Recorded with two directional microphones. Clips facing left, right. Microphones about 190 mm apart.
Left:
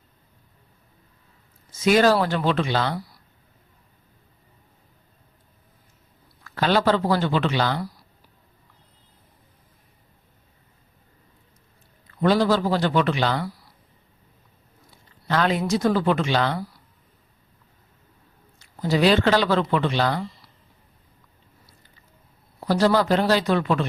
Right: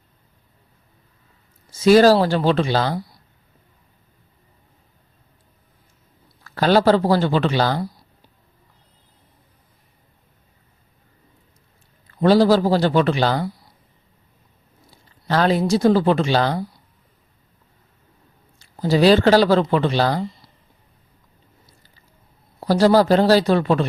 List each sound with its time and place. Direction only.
1.8 s speech: 35° right (ahead or behind)
6.4 s speech: 35° right (ahead or behind)
7.8 s a sound: 25° right (ahead or behind)
12.2 s speech: 35° right (ahead or behind)
13.4 s speech: 20° right (ahead or behind)
14.8 s speech: 35° right (ahead or behind)
16.6 s speech: 20° right (ahead or behind)
18.8 s speech: 30° right (ahead or behind)
22.6 s speech: 35° right (ahead or behind)